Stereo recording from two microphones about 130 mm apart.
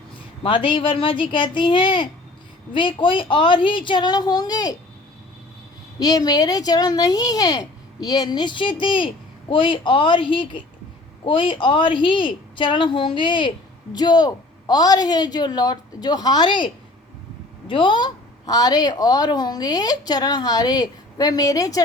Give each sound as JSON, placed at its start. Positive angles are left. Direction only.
{"t": 0.4, "sound": "speech", "side_deg": 40}
{"t": 6.0, "sound": "speech", "side_deg": 30}
{"t": 17.7, "sound": "speech", "side_deg": 40}